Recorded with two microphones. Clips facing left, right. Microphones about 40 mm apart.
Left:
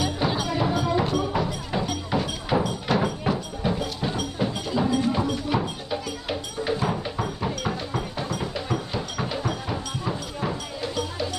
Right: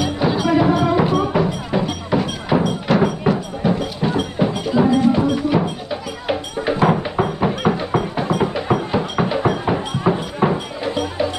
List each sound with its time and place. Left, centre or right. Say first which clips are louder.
0.6 s music: right 7 dB; right
6.2 s music: right 7 dB; right